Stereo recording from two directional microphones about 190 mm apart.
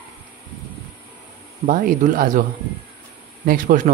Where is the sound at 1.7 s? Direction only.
45° right (ahead or behind).